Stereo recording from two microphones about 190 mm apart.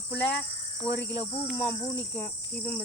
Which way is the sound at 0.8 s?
10° left (ahead or behind).